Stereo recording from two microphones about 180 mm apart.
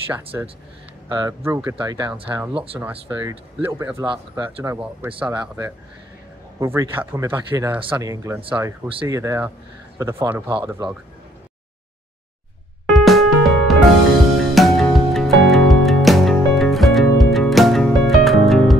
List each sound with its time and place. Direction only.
0.1 s speech: 10° right (ahead or behind)
1.0 s speech: 20° right (ahead or behind)
2.2 s speech: 10° right (ahead or behind)
2.5 s speech: 30° right (ahead or behind)
2.8 s speech: 10° right (ahead or behind); by 4.7 s 25° right (ahead or behind)
5.2 s speech: 10° right (ahead or behind)
12.9 s music: centre (ahead or behind)